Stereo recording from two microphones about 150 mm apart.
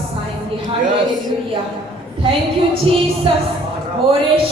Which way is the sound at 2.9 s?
40° right (ahead or behind).